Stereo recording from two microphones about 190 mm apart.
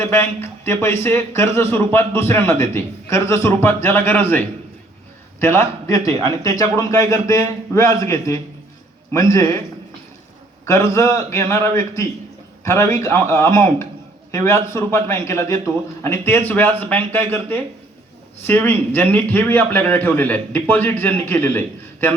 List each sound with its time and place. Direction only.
0.0 s speech: 10° left (ahead or behind)
10.7 s a man's voice: 15° left (ahead or behind)